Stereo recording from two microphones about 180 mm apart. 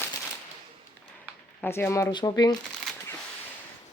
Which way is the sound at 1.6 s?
10° left (ahead or behind).